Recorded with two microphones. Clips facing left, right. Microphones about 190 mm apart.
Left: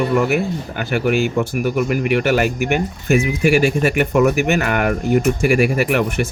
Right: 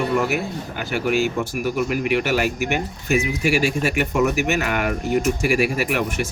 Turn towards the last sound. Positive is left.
turn(degrees=55)  # may be behind; listen again after turning